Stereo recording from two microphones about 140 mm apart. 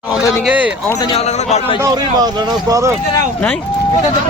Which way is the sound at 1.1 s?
50° left (ahead or behind).